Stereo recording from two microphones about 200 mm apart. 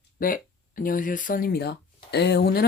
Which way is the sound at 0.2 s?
45° left (ahead or behind).